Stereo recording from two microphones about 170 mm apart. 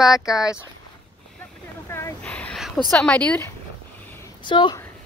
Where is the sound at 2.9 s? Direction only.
5° left (ahead or behind).